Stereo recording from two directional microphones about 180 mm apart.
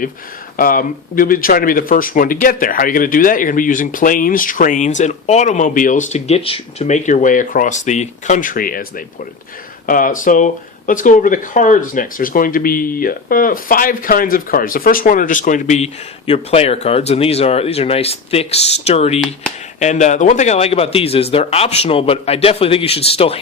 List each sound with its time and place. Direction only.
0.5 s speech: 50° left (ahead or behind)
9.8 s a man's voice: 50° left (ahead or behind); by 23.4 s 35° left (ahead or behind)